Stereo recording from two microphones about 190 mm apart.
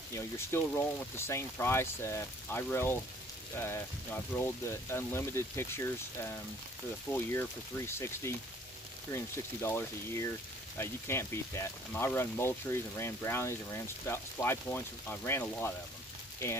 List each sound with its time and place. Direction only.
0.1 s speech: 15° left (ahead or behind)